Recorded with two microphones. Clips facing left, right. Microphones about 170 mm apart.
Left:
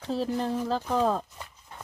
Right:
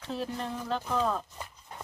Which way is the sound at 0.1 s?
35° left (ahead or behind).